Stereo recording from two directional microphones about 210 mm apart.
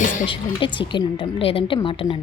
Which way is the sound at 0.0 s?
40° left (ahead or behind).